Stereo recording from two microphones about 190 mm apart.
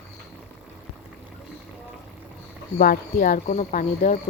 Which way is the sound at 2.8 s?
50° left (ahead or behind).